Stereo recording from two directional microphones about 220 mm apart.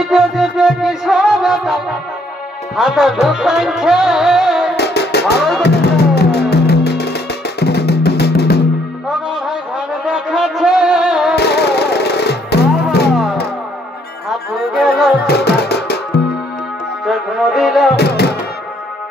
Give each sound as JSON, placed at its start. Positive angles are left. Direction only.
{"t": 0.1, "sound": "music", "side_deg": 0}
{"t": 4.7, "sound": "music", "side_deg": 50}
{"t": 9.1, "sound": "music", "side_deg": -5}
{"t": 11.3, "sound": "music", "side_deg": 50}
{"t": 14.3, "sound": "music", "side_deg": 0}
{"t": 15.2, "sound": "music", "side_deg": 45}
{"t": 17.1, "sound": "music", "side_deg": 0}
{"t": 17.9, "sound": "music", "side_deg": 50}